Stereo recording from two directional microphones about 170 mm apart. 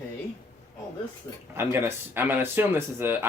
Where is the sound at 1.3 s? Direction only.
20° left (ahead or behind).